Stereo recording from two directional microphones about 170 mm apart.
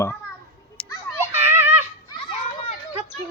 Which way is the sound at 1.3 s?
15° right (ahead or behind).